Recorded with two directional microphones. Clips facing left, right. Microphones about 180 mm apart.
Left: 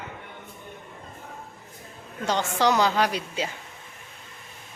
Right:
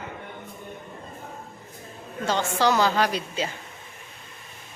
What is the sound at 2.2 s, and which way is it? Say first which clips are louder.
A woman's voice: even; 15° left (ahead or behind).